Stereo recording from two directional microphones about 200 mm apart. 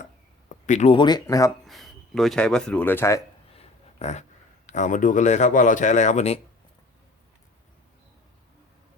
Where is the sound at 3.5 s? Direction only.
35° left (ahead or behind).